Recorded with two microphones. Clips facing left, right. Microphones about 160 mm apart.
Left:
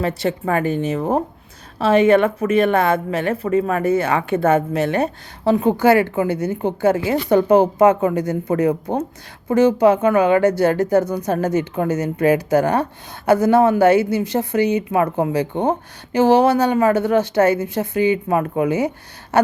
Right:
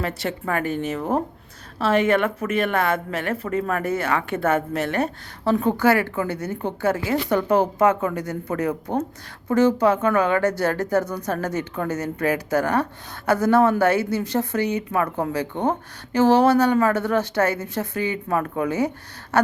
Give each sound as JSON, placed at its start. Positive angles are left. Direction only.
{"t": 0.0, "sound": "a woman's voice", "side_deg": 20}